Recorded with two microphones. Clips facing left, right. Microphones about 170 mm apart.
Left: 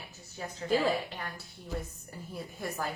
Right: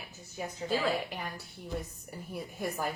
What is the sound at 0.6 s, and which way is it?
Speech, 15° left (ahead or behind).